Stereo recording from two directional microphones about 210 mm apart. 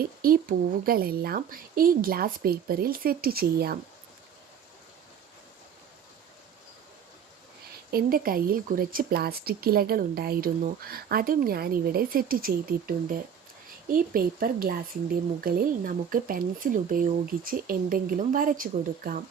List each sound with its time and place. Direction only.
0.0 s speech: 45° right (ahead or behind)
7.9 s speech: 45° right (ahead or behind)